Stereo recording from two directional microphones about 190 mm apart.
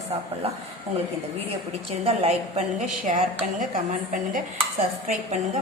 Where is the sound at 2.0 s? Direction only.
35° right (ahead or behind).